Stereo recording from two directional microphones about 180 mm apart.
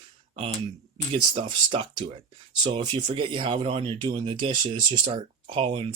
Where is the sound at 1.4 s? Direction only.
25° right (ahead or behind).